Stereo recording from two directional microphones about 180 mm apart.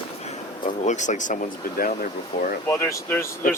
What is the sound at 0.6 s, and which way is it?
Speech, 40° left (ahead or behind).